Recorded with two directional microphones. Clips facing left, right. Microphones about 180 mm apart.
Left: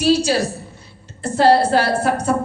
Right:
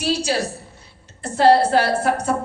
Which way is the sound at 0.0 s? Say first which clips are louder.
Left 5 dB; 35° left (ahead or behind).